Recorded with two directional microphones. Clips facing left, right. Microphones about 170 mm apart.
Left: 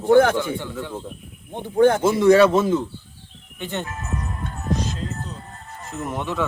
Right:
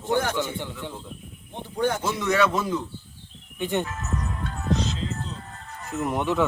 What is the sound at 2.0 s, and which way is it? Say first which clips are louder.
Speech: left 9 dB; 30° left (ahead or behind).